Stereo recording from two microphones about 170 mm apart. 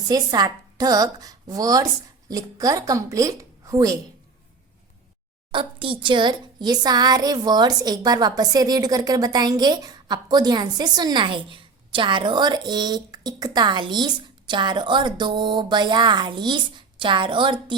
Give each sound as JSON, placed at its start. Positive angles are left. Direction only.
{"t": 0.1, "sound": "a woman's voice", "side_deg": -25}
{"t": 5.5, "sound": "a woman's voice", "side_deg": -30}